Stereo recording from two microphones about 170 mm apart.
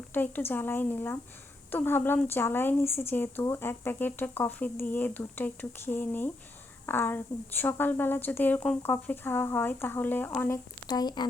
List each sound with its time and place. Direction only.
0.1 s speech: 10° left (ahead or behind)
10.8 s speech: 25° left (ahead or behind)